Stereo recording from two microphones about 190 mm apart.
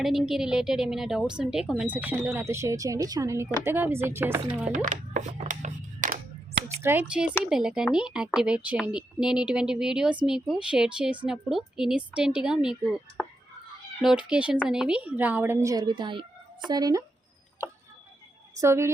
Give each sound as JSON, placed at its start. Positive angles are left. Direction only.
{"t": 0.0, "sound": "a woman's voice", "side_deg": 0}
{"t": 4.7, "sound": "a sound", "side_deg": -40}
{"t": 6.8, "sound": "a woman's voice", "side_deg": -10}
{"t": 18.5, "sound": "a woman's voice", "side_deg": -15}